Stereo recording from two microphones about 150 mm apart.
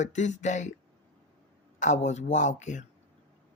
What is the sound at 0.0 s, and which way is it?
Speech, 50° left (ahead or behind).